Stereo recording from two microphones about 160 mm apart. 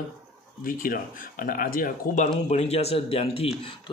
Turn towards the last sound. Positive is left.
turn(degrees=40)  # may be behind; listen again after turning